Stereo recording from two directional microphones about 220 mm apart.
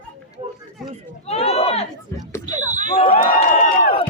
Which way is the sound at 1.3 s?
30° left (ahead or behind).